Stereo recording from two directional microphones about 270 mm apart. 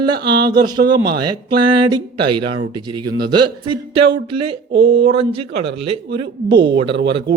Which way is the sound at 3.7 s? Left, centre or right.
Centre.